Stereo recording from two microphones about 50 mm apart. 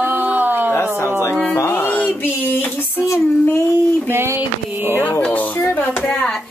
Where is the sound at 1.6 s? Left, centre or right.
Left.